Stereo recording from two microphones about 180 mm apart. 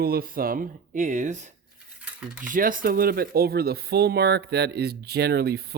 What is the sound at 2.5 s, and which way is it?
Speech, 50° right (ahead or behind).